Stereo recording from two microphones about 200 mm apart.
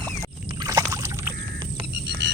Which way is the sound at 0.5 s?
20° right (ahead or behind).